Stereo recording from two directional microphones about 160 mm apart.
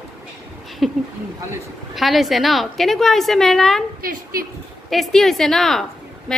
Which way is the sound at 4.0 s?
65° right (ahead or behind).